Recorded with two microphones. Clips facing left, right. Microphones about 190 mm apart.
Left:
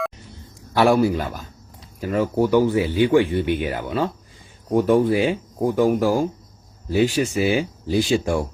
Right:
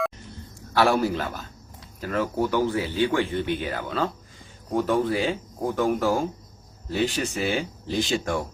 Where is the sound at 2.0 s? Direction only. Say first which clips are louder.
Left 5 dB; 15° left (ahead or behind).